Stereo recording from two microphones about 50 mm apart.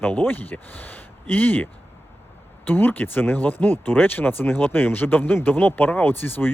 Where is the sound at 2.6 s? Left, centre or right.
Left.